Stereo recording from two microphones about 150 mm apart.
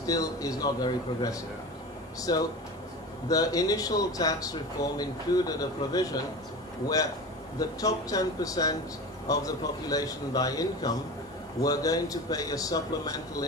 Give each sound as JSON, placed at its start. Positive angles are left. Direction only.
{"t": 0.0, "sound": "speech", "side_deg": 25}